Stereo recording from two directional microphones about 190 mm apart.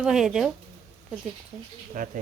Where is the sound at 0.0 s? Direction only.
Centre (ahead or behind).